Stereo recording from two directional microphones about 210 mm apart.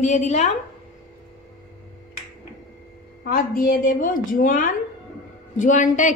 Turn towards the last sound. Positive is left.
turn(degrees=35)  # may be behind; listen again after turning